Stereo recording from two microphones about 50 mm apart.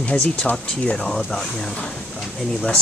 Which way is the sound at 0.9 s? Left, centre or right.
Centre.